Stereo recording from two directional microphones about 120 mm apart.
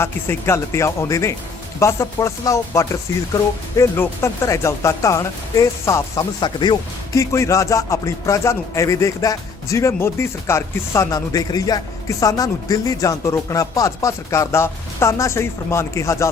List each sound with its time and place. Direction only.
0.0 s speech: 20° left (ahead or behind)
6.4 s speech: 40° left (ahead or behind)
7.2 s speech: 25° left (ahead or behind)